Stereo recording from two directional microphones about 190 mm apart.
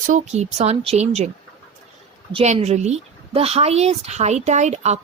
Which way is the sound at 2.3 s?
35° right (ahead or behind).